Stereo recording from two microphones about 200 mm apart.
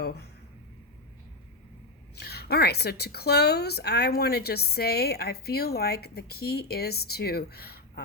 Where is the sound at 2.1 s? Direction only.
50° left (ahead or behind).